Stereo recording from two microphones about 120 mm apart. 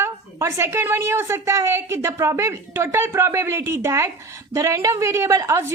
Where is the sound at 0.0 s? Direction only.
25° right (ahead or behind).